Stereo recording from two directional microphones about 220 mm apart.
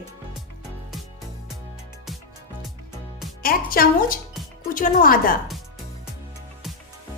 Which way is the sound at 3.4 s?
40° left (ahead or behind).